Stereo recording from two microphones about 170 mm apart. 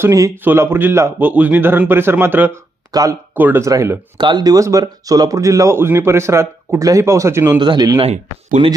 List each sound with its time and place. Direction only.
0.0 s speech: 15° right (ahead or behind)
7.6 s speech: 25° right (ahead or behind)
8.0 s speech: 45° right (ahead or behind)